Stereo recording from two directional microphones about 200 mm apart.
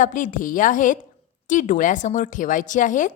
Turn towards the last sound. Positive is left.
turn(degrees=40)  # may be behind; listen again after turning